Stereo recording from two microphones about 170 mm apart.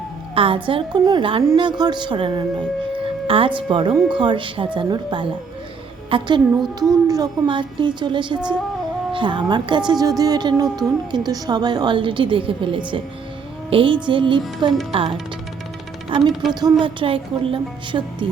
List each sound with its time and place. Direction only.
0.3 s a woman's voice: 30° right (ahead or behind)